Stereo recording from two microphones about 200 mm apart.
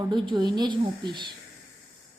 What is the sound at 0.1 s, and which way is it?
A woman's voice, 20° right (ahead or behind).